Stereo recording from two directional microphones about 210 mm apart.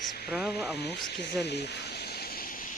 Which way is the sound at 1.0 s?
50° left (ahead or behind).